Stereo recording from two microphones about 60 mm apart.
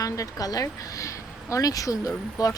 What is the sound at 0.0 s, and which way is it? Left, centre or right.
Speech, left.